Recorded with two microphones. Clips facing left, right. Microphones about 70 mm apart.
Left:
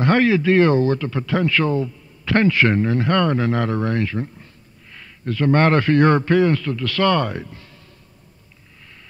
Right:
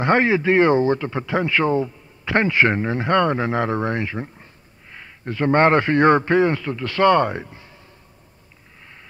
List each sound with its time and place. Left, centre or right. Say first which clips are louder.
0.0 s speech: left 1 dB; right